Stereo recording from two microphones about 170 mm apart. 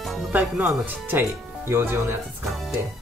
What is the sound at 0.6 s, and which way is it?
Speech, 10° right (ahead or behind).